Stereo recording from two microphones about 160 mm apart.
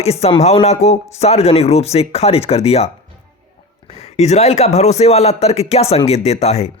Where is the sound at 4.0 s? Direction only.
45° left (ahead or behind).